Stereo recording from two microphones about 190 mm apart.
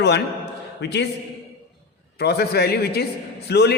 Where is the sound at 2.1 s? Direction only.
60° left (ahead or behind).